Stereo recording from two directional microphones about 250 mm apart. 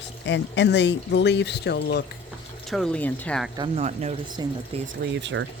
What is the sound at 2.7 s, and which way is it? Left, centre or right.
Speech, centre.